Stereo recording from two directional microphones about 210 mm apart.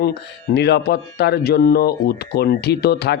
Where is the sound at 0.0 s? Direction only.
55° left (ahead or behind).